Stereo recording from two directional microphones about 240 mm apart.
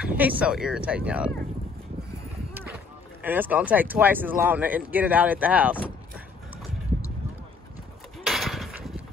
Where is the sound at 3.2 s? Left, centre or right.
Centre.